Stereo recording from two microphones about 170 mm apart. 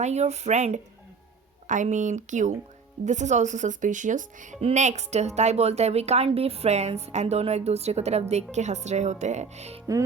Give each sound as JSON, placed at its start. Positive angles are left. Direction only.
{"t": 0.0, "sound": "a woman's voice", "side_deg": -40}